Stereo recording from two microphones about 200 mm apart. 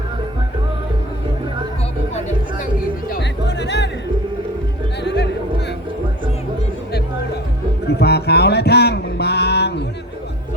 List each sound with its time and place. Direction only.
3.1 s music: 60° left (ahead or behind)
5.0 s music: 60° left (ahead or behind)
7.9 s music: 55° left (ahead or behind)